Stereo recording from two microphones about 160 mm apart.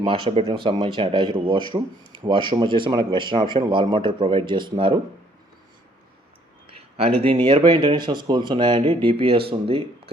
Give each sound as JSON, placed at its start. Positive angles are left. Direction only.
{"t": 0.0, "sound": "speech", "side_deg": -35}
{"t": 6.7, "sound": "a sound", "side_deg": -35}
{"t": 7.2, "sound": "speech", "side_deg": -35}